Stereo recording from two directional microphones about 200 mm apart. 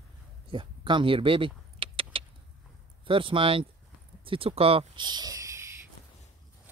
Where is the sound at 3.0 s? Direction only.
25° right (ahead or behind).